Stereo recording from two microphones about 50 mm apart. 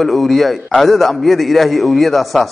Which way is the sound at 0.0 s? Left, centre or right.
Centre.